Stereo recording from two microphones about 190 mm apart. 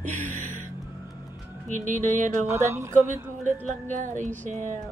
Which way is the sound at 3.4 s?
40° right (ahead or behind).